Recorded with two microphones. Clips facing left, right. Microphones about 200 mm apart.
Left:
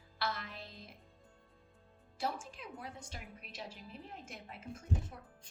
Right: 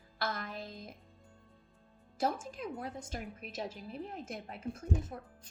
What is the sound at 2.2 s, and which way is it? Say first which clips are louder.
A woman's voice: right 6 dB; 45° right (ahead or behind).